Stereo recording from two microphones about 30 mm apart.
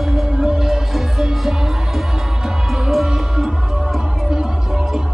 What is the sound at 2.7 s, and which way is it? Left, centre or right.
Music, centre.